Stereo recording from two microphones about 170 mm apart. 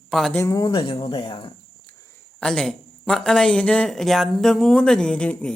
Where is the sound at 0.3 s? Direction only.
20° left (ahead or behind).